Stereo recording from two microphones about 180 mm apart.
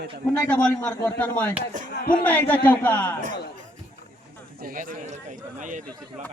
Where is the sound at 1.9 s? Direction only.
55° left (ahead or behind).